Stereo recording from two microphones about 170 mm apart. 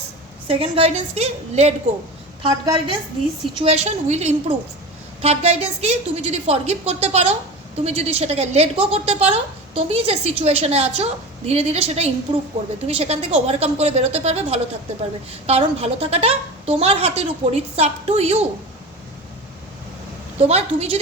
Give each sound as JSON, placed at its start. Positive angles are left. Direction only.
{"t": 0.4, "sound": "a woman's voice", "side_deg": -35}
{"t": 20.4, "sound": "a woman's voice", "side_deg": -40}